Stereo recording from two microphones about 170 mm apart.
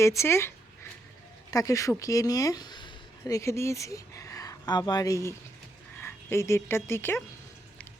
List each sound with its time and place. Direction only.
0.2 s speech: 15° left (ahead or behind)